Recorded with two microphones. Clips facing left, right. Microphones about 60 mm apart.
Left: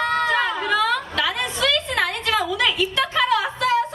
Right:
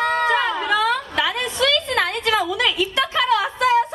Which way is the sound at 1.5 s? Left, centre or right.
Centre.